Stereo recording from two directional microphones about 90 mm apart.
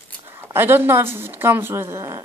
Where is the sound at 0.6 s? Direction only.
25° right (ahead or behind).